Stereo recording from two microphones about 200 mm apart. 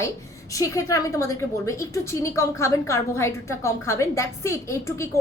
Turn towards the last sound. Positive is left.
turn(degrees=15)  # may be behind; listen again after turning